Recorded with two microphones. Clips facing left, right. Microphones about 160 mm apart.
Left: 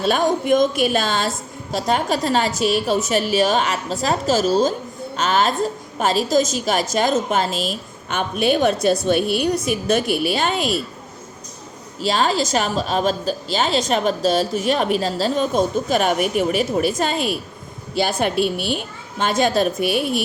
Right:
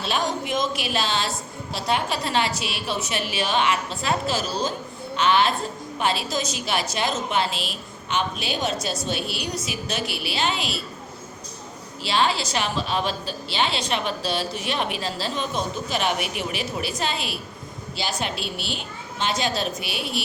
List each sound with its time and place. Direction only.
0.0 s a woman's voice: 50° left (ahead or behind)
12.0 s a woman's voice: 40° left (ahead or behind)